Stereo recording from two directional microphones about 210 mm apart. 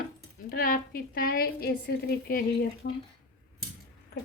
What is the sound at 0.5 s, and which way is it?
A woman's voice, 45° left (ahead or behind).